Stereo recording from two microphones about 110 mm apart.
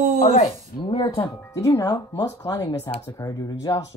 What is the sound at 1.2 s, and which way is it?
Speech, 30° left (ahead or behind).